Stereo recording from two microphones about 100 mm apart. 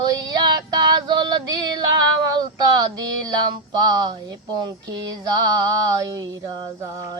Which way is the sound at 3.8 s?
45° right (ahead or behind).